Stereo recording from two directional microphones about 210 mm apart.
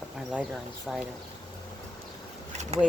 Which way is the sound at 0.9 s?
Centre (ahead or behind).